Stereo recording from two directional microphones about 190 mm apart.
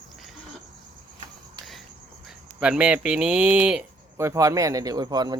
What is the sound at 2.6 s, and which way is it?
Speech, 5° right (ahead or behind).